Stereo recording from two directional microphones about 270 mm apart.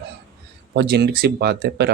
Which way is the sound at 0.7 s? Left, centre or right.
Right.